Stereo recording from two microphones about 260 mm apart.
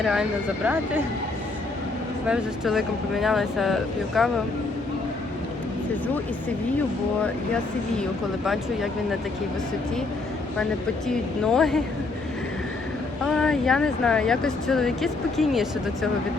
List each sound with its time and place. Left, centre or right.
0.0 s speech: centre
2.2 s speech: centre
11.1 s speech: centre
13.2 s speech: centre